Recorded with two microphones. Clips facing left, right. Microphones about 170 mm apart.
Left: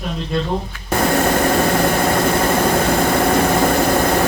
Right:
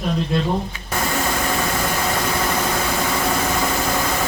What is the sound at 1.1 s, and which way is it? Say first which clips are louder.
Vehicle: left 7 dB; 55° left (ahead or behind).